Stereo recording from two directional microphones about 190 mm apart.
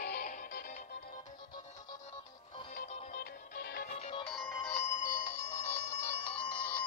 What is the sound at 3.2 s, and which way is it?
Music, 55° left (ahead or behind).